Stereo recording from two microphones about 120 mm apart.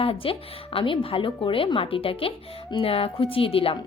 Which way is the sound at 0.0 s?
50° left (ahead or behind).